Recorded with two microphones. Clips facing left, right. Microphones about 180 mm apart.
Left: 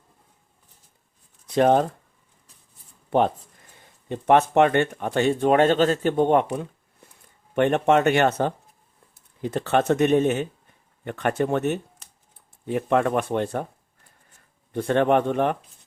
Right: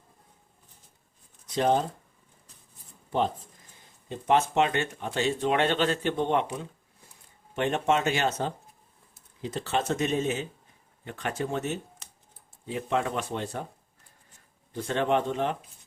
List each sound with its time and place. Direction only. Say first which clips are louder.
1.5 s speech: left 6 dB; 60° left (ahead or behind)
3.1 s speech: left 6 dB; 60° left (ahead or behind)
7.5 s speech: left 7 dB; 60° left (ahead or behind)
14.7 s speech: left 6 dB; 55° left (ahead or behind)